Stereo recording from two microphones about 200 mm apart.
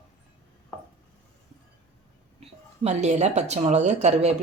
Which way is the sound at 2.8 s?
35° right (ahead or behind).